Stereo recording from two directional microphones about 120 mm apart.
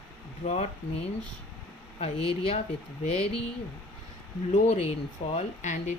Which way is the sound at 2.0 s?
55° left (ahead or behind).